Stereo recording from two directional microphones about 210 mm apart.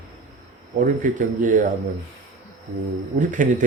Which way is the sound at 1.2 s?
35° right (ahead or behind).